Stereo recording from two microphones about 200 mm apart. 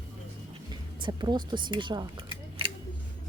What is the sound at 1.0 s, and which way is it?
Speech, 20° right (ahead or behind).